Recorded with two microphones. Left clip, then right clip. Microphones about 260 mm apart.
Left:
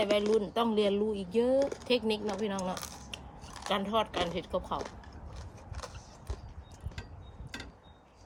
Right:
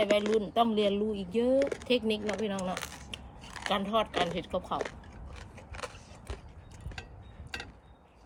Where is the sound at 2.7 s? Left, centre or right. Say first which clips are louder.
Right 2 dB; right.